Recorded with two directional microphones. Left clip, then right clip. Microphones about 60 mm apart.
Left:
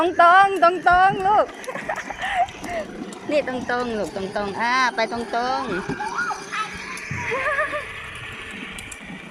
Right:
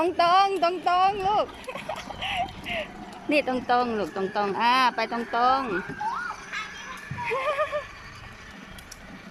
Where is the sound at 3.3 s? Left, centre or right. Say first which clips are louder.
Left 1 dB; right.